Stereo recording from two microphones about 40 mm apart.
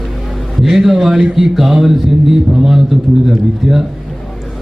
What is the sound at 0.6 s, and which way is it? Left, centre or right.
A man's voice, centre.